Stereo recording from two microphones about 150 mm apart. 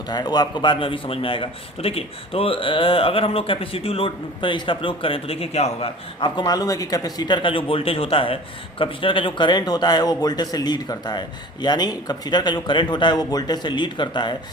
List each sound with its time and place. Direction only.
0.1 s a man's voice: 30° left (ahead or behind)
6.1 s a man's voice: 30° left (ahead or behind)